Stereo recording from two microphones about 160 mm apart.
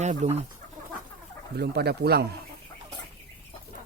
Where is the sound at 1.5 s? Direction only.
90° right.